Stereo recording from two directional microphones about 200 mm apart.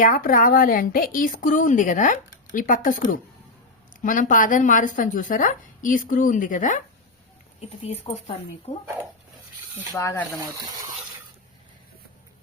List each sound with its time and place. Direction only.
0.0 s a woman's voice: 45° left (ahead or behind)
9.9 s speech: 15° left (ahead or behind)